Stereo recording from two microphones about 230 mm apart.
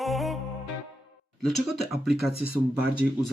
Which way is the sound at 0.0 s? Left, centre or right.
Centre.